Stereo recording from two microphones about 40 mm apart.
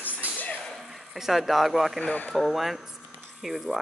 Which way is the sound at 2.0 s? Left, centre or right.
Left.